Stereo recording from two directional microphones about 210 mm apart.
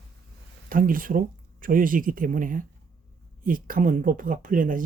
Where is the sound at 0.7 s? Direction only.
40° right (ahead or behind).